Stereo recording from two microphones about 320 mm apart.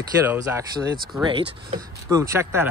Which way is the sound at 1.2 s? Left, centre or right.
Centre.